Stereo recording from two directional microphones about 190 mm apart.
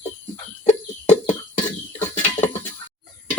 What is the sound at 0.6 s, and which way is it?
Chicken, 35° left (ahead or behind).